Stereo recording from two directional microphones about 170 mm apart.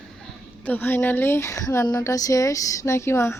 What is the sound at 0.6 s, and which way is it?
Speech, 10° left (ahead or behind).